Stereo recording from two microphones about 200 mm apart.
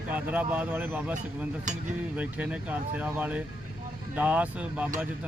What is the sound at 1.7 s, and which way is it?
Speech, 40° right (ahead or behind).